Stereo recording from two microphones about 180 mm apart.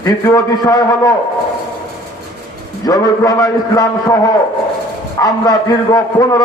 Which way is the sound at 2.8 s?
20° left (ahead or behind).